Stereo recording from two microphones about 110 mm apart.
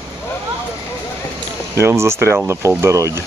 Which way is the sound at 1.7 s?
25° right (ahead or behind).